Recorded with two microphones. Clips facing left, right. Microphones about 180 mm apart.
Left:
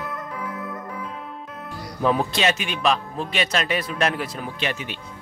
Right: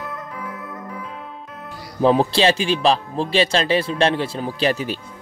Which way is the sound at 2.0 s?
30° right (ahead or behind).